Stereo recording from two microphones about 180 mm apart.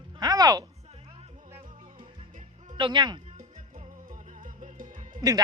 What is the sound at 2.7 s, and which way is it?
Speech, 25° right (ahead or behind).